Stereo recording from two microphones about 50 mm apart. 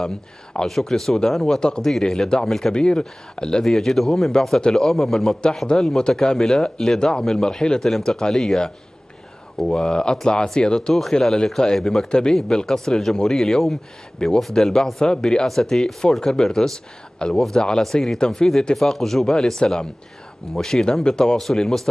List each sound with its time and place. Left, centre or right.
0.0 s a man's voice: centre
1.6 s a man's voice: centre
1.9 s a man's voice: centre
3.6 s a man's voice: centre